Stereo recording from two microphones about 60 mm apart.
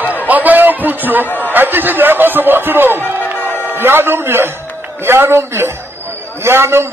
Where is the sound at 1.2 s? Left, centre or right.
Left.